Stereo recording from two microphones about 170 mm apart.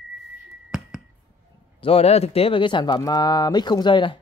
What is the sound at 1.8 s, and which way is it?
Speech, 35° left (ahead or behind).